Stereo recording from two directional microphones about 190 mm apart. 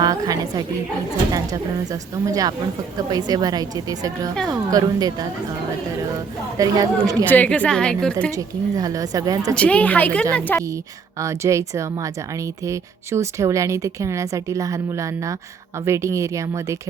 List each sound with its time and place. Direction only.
0.0 s a woman's voice: 20° right (ahead or behind)
1.9 s a woman's voice: 20° right (ahead or behind)
6.6 s a woman's voice: 20° right (ahead or behind)
7.3 s a woman's voice: 10° left (ahead or behind)
8.4 s a woman's voice: 20° right (ahead or behind)
9.6 s a woman's voice: 5° left (ahead or behind)
11.2 s speech: 15° right (ahead or behind)